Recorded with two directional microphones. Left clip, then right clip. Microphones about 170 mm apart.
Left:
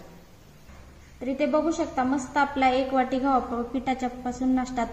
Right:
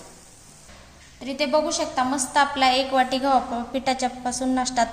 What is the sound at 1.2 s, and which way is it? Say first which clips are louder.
A woman's voice: right 2 dB; 60° right (ahead or behind).